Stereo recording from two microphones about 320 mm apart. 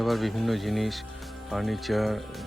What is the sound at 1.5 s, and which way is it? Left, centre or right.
Speech, centre.